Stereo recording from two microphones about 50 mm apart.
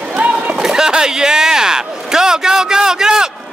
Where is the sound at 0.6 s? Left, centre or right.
Centre.